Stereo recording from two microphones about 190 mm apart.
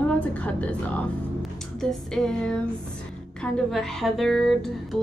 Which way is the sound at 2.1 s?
5° left (ahead or behind).